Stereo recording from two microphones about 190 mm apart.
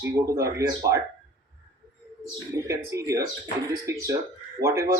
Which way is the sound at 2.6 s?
15° right (ahead or behind).